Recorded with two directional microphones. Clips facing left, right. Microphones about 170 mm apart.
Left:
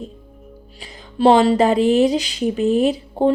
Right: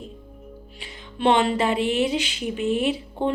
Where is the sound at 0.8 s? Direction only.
35° left (ahead or behind).